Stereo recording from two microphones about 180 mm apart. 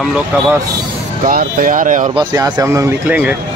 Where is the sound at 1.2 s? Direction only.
50° right (ahead or behind).